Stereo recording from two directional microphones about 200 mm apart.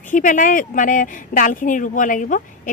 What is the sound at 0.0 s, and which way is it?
A woman's voice, 40° left (ahead or behind).